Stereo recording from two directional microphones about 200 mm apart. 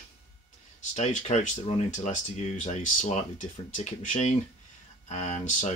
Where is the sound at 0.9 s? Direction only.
35° left (ahead or behind).